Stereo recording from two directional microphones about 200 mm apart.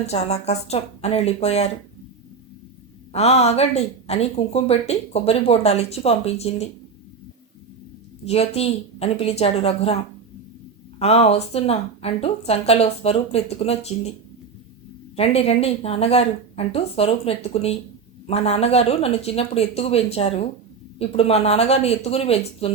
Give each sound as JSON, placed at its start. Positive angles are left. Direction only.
{"t": 0.0, "sound": "speech", "side_deg": 35}
{"t": 3.1, "sound": "speech", "side_deg": 30}
{"t": 8.2, "sound": "speech", "side_deg": 30}
{"t": 11.0, "sound": "speech", "side_deg": 30}
{"t": 15.1, "sound": "speech", "side_deg": 30}